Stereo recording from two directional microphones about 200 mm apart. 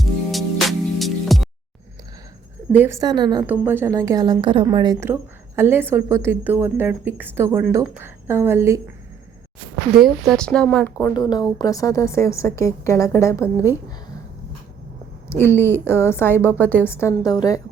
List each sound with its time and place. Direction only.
0.0 s music: centre (ahead or behind)
2.7 s a woman's voice: 10° right (ahead or behind)
3.4 s a woman's voice: 10° right (ahead or behind)
10.0 s speech: centre (ahead or behind)
10.9 s a woman's voice: 15° left (ahead or behind)
15.3 s a woman's voice: 10° left (ahead or behind)